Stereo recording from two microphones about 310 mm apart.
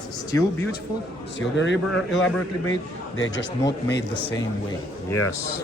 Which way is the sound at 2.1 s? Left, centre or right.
Centre.